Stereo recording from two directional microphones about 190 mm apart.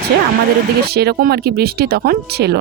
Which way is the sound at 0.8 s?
55° right (ahead or behind).